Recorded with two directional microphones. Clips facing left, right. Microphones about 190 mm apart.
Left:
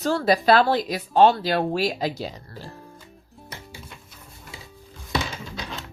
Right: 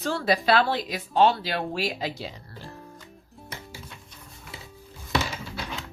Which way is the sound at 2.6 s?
Centre (ahead or behind).